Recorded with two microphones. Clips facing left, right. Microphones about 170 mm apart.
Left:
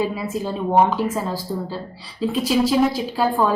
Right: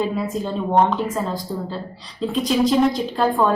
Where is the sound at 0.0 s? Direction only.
5° left (ahead or behind).